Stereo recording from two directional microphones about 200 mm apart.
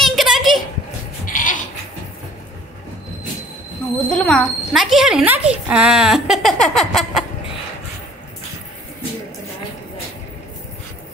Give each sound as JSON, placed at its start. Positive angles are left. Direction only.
{"t": 0.0, "sound": "a sound", "side_deg": 0}
{"t": 1.2, "sound": "goat", "side_deg": 40}
{"t": 4.1, "sound": "speech", "side_deg": 5}